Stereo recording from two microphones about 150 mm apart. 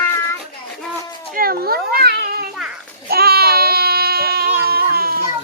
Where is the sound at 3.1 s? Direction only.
90° right.